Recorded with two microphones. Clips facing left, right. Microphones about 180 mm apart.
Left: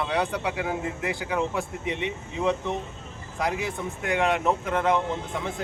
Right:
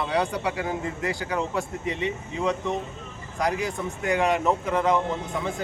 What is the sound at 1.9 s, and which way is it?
Speech, 65° left (ahead or behind).